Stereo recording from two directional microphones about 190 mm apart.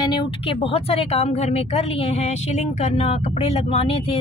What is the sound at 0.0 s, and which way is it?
Speech, 25° left (ahead or behind).